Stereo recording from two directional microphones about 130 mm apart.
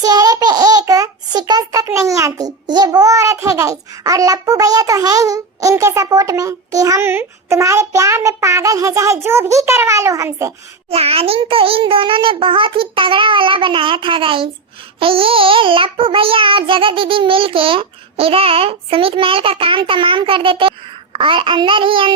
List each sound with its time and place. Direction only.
0.0 s a child's voice: 30° right (ahead or behind)
10.8 s child singing: 50° right (ahead or behind)